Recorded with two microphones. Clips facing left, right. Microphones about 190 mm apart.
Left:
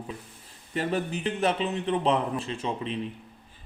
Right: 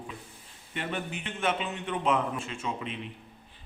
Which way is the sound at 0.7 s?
40° left (ahead or behind).